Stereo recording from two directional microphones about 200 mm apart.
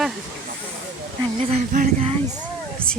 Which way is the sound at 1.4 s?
35° right (ahead or behind).